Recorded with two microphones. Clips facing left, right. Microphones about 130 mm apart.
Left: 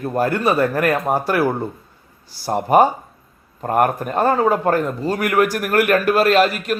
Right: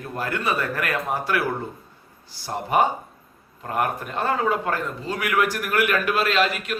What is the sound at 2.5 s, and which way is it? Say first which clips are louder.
A man's voice: left 7 dB; 45° left (ahead or behind).